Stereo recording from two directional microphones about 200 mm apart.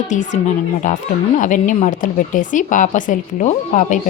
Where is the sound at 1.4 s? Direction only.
40° left (ahead or behind).